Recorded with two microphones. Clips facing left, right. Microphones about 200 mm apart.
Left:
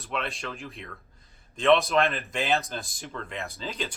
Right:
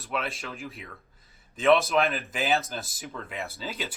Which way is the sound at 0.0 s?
Centre (ahead or behind).